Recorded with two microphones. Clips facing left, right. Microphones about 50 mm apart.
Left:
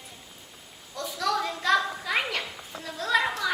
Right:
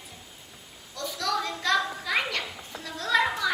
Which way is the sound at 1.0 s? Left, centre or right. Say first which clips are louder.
Left 1 dB; centre.